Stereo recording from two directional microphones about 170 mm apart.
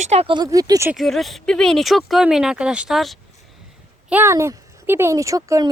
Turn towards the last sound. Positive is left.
turn(degrees=-20)  # may be behind; listen again after turning